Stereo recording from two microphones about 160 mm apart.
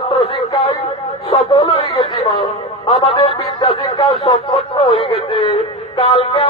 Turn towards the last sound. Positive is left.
turn(degrees=35)  # may be behind; listen again after turning